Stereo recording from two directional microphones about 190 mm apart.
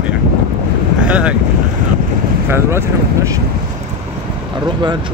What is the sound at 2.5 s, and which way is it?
Speech, 15° right (ahead or behind).